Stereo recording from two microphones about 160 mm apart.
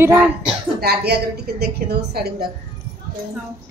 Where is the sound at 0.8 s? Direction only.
80° right.